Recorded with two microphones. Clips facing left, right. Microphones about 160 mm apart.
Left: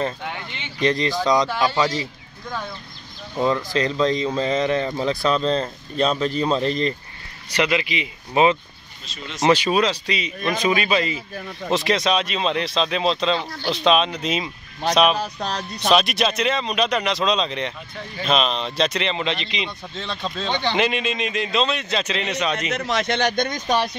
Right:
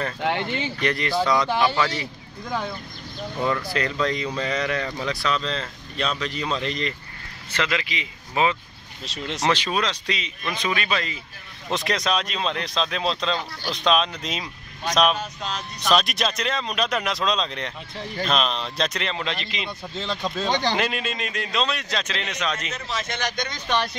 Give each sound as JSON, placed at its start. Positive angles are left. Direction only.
{"t": 0.7, "sound": "speech", "side_deg": 20}
{"t": 3.3, "sound": "speech", "side_deg": 25}
{"t": 7.5, "sound": "speech", "side_deg": 15}
{"t": 9.0, "sound": "speech", "side_deg": -75}
{"t": 9.4, "sound": "speech", "side_deg": 10}
{"t": 10.4, "sound": "speech", "side_deg": 45}
{"t": 10.7, "sound": "speech", "side_deg": 10}
{"t": 15.4, "sound": "speech", "side_deg": 35}
{"t": 15.9, "sound": "speech", "side_deg": 0}
{"t": 20.7, "sound": "speech", "side_deg": 0}
{"t": 22.7, "sound": "speech", "side_deg": 75}